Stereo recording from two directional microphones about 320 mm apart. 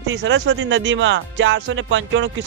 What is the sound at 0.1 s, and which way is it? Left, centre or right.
Speech, right.